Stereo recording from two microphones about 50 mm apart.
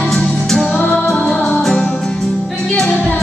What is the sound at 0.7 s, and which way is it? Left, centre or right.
Music, left.